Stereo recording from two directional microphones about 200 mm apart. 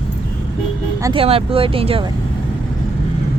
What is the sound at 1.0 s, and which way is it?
Speech, 25° right (ahead or behind).